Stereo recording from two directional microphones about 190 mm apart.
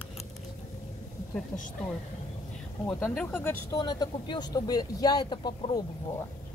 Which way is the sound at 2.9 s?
5° left (ahead or behind).